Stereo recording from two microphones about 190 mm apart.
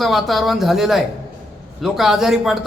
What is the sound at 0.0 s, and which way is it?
A man's voice, centre (ahead or behind).